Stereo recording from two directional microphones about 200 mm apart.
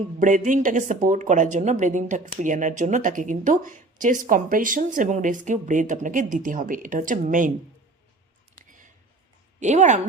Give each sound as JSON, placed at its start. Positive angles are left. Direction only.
{"t": 0.2, "sound": "speech", "side_deg": -40}
{"t": 9.6, "sound": "speech", "side_deg": -35}